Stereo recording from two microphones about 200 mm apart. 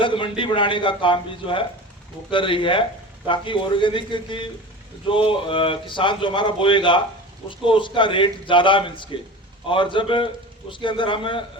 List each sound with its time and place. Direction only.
0.0 s speech: 25° left (ahead or behind)